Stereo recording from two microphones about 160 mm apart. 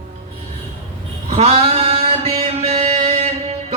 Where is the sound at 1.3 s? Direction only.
40° right (ahead or behind).